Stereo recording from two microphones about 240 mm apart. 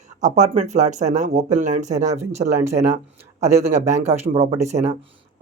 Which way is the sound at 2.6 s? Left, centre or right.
Centre.